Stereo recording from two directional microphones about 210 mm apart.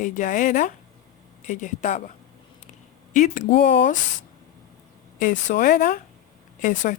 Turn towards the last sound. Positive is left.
turn(degrees=40)  # may be behind; listen again after turning